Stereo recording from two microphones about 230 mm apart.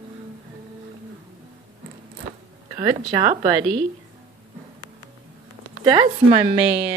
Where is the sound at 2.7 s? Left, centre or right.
Centre.